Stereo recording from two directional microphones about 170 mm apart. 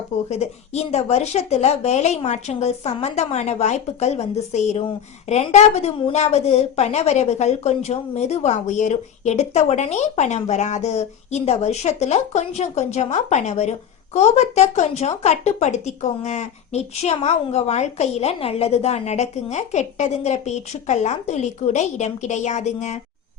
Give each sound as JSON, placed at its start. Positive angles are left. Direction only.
{"t": 0.3, "sound": "a woman's voice", "side_deg": 40}